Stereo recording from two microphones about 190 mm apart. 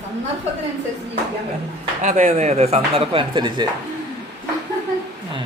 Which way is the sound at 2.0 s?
40° right (ahead or behind).